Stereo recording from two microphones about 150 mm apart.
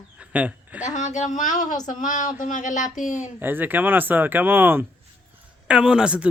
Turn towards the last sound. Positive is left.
turn(degrees=-5)  # may be behind; listen again after turning